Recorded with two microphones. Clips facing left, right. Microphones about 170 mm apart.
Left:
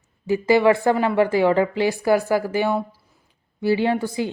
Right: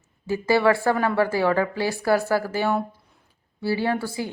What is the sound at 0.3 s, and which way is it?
A woman's voice, 15° left (ahead or behind).